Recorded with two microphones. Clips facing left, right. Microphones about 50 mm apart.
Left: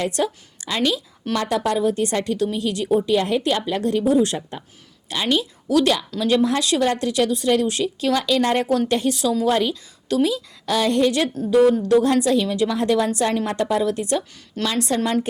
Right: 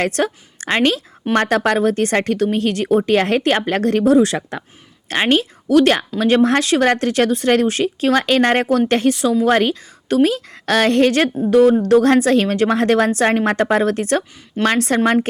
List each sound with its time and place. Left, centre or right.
0.0 s a woman's voice: right
5.0 s speech: right
9.0 s a woman's voice: right
9.5 s a woman's voice: right